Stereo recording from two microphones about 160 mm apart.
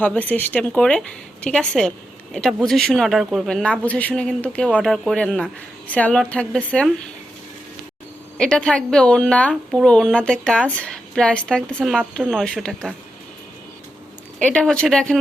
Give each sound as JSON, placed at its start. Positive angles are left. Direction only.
{"t": 0.0, "sound": "a woman's voice", "side_deg": 10}
{"t": 8.4, "sound": "a woman's voice", "side_deg": 5}
{"t": 14.3, "sound": "a woman's voice", "side_deg": 5}